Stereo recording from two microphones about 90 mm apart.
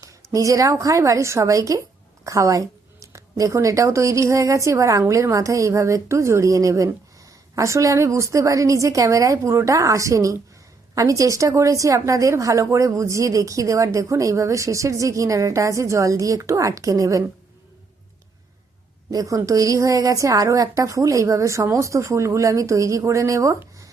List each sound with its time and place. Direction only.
0.0 s a woman's voice: 40° right (ahead or behind)
19.1 s a woman's voice: 40° right (ahead or behind)